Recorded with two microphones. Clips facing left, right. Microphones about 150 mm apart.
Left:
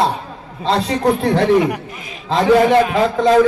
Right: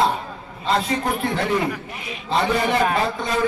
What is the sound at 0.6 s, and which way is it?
A man's voice, 85° left.